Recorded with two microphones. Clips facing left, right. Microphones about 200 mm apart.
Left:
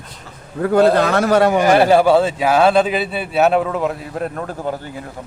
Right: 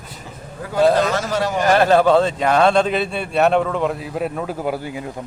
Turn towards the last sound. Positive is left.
turn(degrees=-10)  # may be behind; listen again after turning